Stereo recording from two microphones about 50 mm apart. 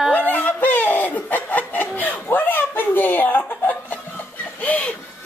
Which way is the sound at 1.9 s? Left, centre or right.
Left.